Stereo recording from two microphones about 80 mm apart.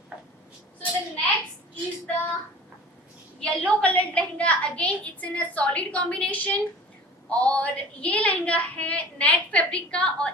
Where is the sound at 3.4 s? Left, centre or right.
Centre.